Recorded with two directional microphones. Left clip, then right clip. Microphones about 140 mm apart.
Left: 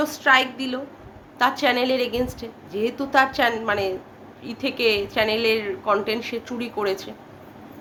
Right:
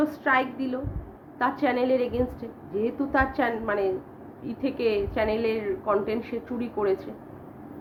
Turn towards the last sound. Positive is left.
turn(degrees=20)  # may be behind; listen again after turning